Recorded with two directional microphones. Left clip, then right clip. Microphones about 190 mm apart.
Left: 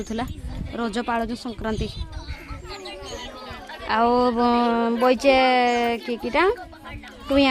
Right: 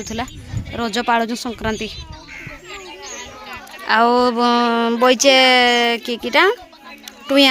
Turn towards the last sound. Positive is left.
turn(degrees=0)  # may be behind; listen again after turning